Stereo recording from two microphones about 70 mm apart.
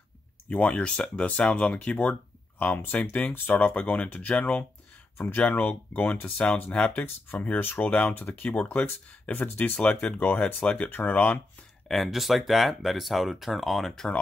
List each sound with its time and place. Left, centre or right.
0.5 s speech: centre
6.4 s speech: centre
10.9 s speech: left
11.9 s speech: centre